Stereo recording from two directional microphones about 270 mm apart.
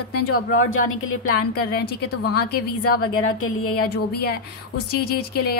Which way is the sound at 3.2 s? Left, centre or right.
Left.